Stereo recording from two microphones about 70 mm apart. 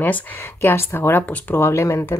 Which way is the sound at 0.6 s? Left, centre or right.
Left.